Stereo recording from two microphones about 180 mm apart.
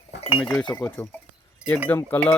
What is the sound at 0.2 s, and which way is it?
Chink, 30° left (ahead or behind).